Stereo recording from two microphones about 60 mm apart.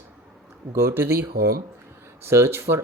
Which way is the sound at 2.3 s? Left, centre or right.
Right.